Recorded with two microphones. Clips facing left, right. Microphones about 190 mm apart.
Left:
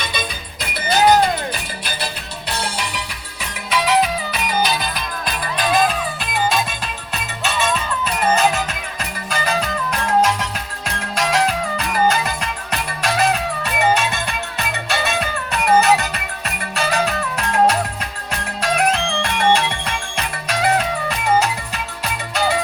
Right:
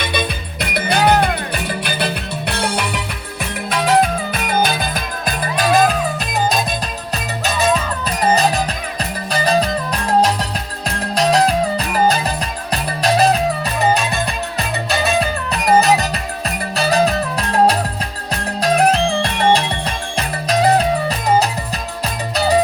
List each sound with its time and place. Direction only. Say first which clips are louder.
0.0 s music: right 5 dB; 60° right (ahead or behind); by 22.6 s 35° right (ahead or behind)